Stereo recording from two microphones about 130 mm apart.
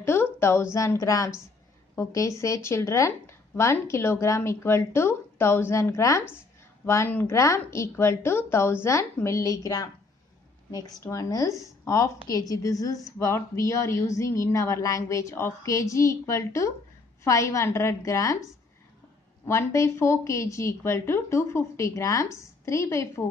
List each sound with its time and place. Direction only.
0.0 s a woman's voice: 20° left (ahead or behind)
19.4 s a woman's voice: 20° left (ahead or behind)